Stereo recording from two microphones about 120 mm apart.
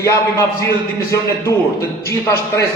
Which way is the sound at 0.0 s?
25° left (ahead or behind).